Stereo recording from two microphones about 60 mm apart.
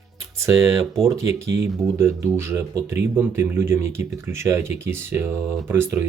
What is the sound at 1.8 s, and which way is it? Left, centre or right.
Speech, centre.